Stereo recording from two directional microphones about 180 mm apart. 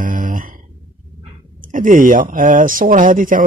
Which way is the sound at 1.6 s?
45° right (ahead or behind).